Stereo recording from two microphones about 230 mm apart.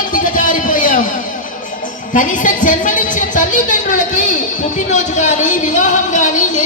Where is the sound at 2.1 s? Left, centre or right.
Left.